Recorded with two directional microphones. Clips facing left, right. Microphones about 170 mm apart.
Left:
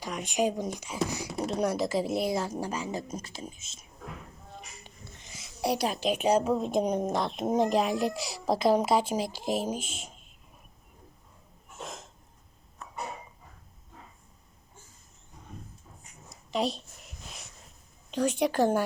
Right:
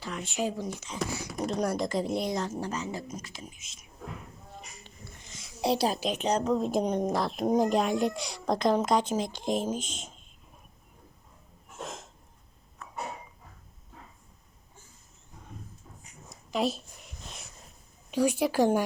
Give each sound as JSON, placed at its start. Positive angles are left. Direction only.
{"t": 0.0, "sound": "speech", "side_deg": 15}
{"t": 1.5, "sound": "a child's voice", "side_deg": 5}
{"t": 3.1, "sound": "speech", "side_deg": 30}
{"t": 4.8, "sound": "wheeze", "side_deg": 15}
{"t": 5.6, "sound": "a woman's voice", "side_deg": -30}
{"t": 6.1, "sound": "a child's voice", "side_deg": 10}
{"t": 16.3, "sound": "a sound", "side_deg": 0}
{"t": 18.1, "sound": "a woman's voice", "side_deg": -10}